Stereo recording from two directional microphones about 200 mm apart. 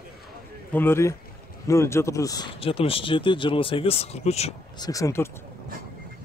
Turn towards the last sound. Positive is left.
turn(degrees=10)  # may be behind; listen again after turning